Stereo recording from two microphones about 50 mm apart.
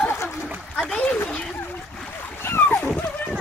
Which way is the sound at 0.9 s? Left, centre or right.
Left.